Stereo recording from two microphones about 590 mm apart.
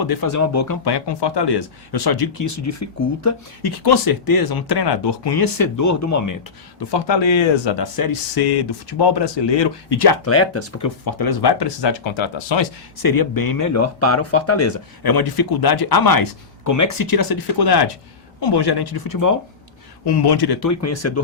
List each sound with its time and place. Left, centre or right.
0.0 s speech: left
0.9 s speech: left
3.6 s speech: left
6.9 s speech: left
10.2 s speech: left
15.0 s speech: left